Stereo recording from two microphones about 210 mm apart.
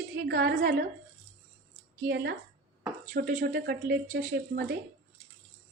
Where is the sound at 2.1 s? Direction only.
55° right (ahead or behind).